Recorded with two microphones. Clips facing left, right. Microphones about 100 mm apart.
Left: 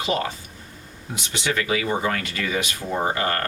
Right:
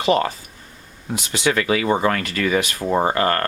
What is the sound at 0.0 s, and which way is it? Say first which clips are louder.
Speech: right 7 dB; 65° right (ahead or behind).